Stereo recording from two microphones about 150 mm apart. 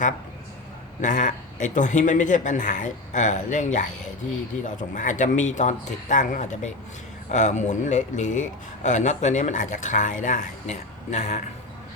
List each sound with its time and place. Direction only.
1.0 s a man's voice: 55° left (ahead or behind)